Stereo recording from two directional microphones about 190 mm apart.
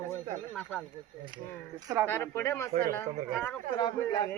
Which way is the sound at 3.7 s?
20° left (ahead or behind).